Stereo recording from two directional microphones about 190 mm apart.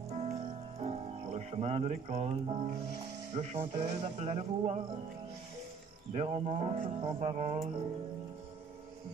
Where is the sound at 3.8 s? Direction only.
35° right (ahead or behind).